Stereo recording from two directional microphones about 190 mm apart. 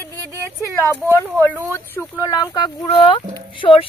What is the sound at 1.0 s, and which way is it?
Speech, 15° right (ahead or behind).